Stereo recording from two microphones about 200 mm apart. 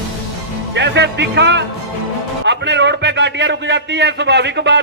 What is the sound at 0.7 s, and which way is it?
A man's voice, 60° right (ahead or behind).